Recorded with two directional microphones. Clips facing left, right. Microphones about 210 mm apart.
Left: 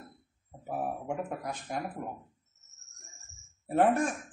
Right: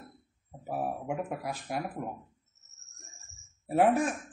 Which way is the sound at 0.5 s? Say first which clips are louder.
Right 1 dB; 5° right (ahead or behind).